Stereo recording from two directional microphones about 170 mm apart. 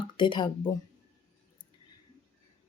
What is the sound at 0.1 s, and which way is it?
Speech, 25° left (ahead or behind).